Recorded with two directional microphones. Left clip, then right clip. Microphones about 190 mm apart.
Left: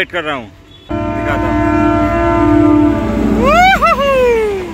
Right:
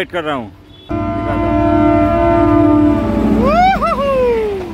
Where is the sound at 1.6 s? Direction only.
15° right (ahead or behind).